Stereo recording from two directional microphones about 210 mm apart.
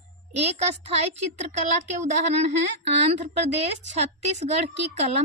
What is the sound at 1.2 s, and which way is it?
A woman's voice, 35° right (ahead or behind).